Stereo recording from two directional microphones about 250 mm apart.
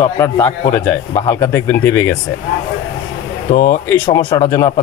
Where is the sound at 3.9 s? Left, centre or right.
Centre.